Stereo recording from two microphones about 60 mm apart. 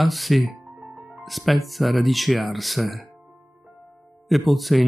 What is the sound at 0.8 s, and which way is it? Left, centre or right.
Music, right.